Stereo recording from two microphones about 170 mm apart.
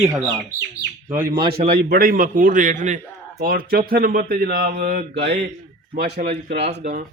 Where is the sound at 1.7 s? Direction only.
65° right (ahead or behind); by 2.9 s 45° right (ahead or behind).